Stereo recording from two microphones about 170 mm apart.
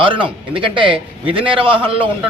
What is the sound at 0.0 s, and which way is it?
A man's voice, 30° right (ahead or behind).